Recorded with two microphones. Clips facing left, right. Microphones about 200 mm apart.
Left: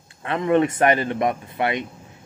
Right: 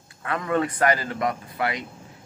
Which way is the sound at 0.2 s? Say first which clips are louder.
Left 6 dB; 25° left (ahead or behind).